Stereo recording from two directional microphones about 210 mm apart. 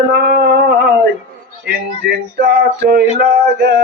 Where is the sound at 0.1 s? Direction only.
50° right (ahead or behind).